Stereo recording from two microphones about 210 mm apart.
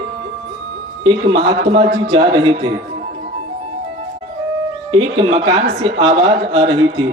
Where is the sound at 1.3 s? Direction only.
25° right (ahead or behind).